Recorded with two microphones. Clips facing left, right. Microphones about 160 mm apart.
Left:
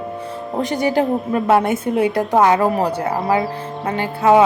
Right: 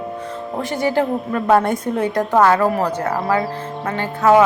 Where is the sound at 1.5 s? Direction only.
5° left (ahead or behind); by 3.4 s 25° left (ahead or behind).